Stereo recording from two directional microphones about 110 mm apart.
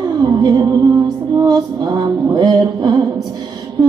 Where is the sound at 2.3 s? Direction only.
35° right (ahead or behind).